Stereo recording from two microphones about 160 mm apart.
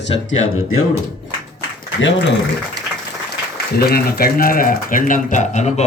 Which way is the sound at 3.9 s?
65° left (ahead or behind).